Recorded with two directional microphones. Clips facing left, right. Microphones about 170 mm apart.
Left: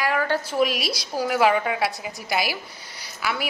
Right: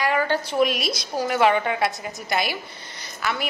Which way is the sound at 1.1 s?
5° left (ahead or behind).